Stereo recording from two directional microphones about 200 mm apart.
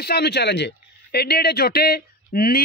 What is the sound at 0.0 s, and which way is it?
Speech, 55° left (ahead or behind).